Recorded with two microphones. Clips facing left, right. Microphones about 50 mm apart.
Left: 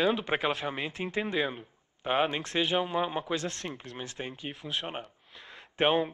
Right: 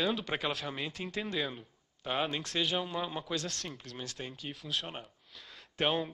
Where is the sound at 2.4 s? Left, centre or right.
Centre.